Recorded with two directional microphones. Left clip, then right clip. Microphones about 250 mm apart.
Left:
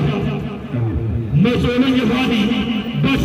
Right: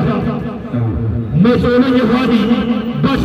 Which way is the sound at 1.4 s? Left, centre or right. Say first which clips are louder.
Right 5 dB; centre.